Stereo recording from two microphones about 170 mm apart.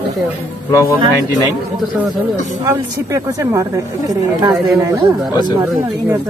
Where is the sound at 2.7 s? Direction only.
15° right (ahead or behind).